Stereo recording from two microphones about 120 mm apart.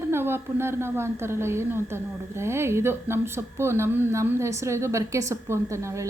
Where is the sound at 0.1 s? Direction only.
20° right (ahead or behind).